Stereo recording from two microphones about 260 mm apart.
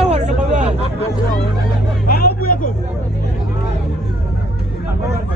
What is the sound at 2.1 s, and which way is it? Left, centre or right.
Vehicle, left.